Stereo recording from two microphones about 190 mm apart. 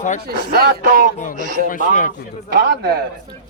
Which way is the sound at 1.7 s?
45° left (ahead or behind).